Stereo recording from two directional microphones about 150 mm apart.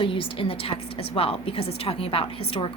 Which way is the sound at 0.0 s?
35° left (ahead or behind).